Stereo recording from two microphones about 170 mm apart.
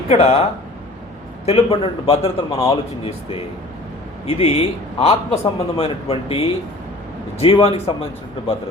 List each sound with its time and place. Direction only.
0.1 s a man's voice: 35° left (ahead or behind)
1.5 s a man's voice: 35° left (ahead or behind)